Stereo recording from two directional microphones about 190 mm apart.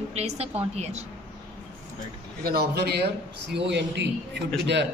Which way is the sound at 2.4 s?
55° right (ahead or behind).